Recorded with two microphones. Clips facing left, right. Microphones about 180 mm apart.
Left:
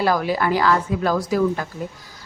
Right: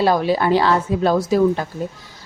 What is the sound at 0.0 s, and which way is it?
Speech, 25° right (ahead or behind).